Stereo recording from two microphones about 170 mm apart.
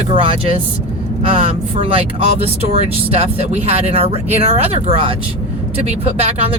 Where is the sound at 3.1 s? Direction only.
35° right (ahead or behind).